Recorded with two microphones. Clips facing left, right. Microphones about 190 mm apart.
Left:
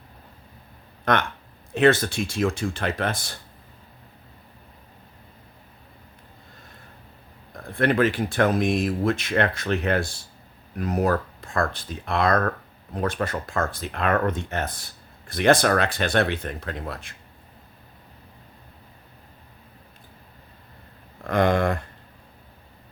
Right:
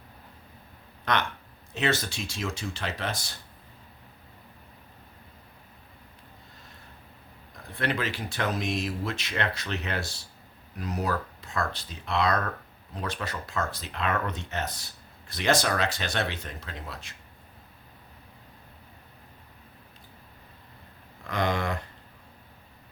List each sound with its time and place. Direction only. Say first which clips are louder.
1.1 s speech: left 5 dB; 50° left (ahead or behind)
7.5 s speech: left 8 dB; 50° left (ahead or behind)
21.2 s a sound: left 8 dB; 50° left (ahead or behind)